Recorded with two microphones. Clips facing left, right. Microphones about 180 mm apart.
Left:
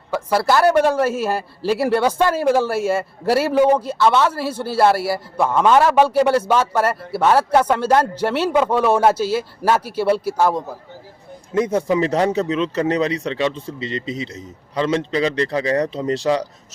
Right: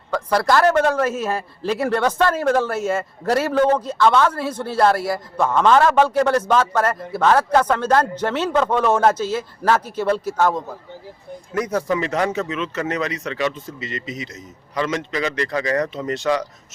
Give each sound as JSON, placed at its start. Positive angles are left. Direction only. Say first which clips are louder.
{"t": 0.1, "sound": "a man's voice", "louder": "left 1 dB", "side_deg": 5}
{"t": 11.5, "sound": "speech", "louder": "left 4 dB", "side_deg": 25}